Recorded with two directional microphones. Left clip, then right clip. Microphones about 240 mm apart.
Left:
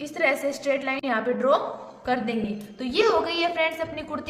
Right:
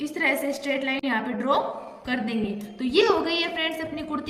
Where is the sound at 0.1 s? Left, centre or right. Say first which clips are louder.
Left 2 dB; left.